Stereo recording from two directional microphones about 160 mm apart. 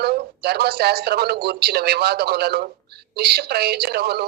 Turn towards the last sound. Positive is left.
turn(degrees=-85)